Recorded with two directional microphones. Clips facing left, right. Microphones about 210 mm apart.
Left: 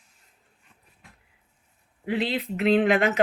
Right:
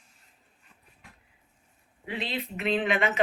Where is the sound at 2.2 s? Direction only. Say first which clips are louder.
Left 6 dB; 75° left (ahead or behind).